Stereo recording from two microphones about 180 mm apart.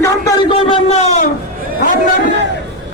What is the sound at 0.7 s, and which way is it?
Speech, 35° left (ahead or behind).